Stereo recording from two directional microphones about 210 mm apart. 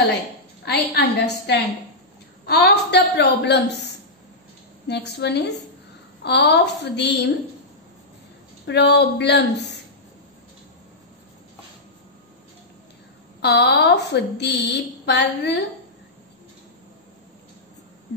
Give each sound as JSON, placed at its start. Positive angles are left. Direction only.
{"t": 0.7, "sound": "a woman's voice", "side_deg": 50}
{"t": 4.8, "sound": "a woman's voice", "side_deg": 55}
{"t": 8.6, "sound": "speech", "side_deg": 55}
{"t": 13.4, "sound": "a woman's voice", "side_deg": 50}